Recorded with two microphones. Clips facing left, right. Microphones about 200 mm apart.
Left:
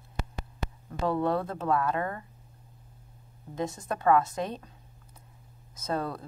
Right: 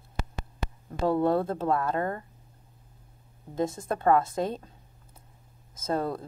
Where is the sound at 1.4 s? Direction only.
30° right (ahead or behind).